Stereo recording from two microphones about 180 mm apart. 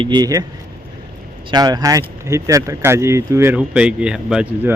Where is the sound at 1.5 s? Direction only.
20° right (ahead or behind).